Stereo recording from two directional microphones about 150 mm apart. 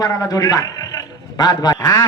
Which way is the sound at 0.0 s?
25° left (ahead or behind).